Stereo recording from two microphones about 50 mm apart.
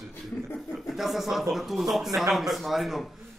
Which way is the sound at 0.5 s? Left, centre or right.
Centre.